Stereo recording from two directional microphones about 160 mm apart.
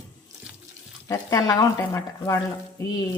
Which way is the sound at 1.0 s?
20° left (ahead or behind).